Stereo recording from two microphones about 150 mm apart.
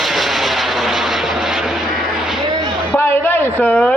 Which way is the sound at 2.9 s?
15° left (ahead or behind).